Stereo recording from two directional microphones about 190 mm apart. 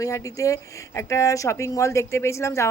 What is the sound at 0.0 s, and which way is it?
Speech, 15° left (ahead or behind).